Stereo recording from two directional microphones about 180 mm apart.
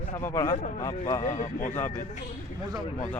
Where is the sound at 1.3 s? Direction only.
40° left (ahead or behind).